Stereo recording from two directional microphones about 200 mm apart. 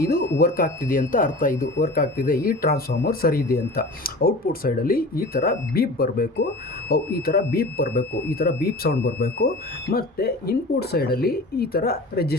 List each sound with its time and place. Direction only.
0.0 s speech: 45° left (ahead or behind)